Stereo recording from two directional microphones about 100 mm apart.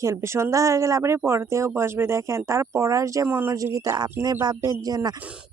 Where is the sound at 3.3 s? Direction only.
20° right (ahead or behind).